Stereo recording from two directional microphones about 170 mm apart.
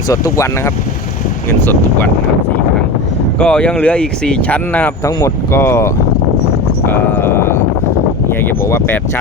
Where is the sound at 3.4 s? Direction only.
5° left (ahead or behind).